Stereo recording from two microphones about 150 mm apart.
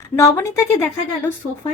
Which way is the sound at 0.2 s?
20° left (ahead or behind).